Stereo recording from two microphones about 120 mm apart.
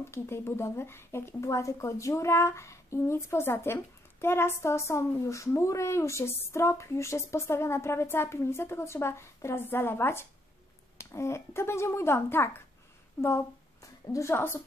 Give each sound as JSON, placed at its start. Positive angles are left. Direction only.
{"t": 0.1, "sound": "speech", "side_deg": 20}
{"t": 14.0, "sound": "speech", "side_deg": 25}